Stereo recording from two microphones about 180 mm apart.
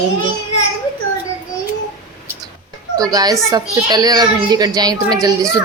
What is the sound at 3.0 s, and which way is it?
A woman's voice, 20° right (ahead or behind).